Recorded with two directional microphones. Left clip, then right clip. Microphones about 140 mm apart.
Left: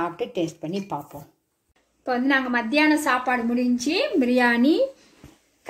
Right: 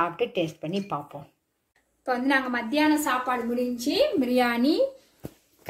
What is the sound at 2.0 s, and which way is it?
Speech, 50° left (ahead or behind).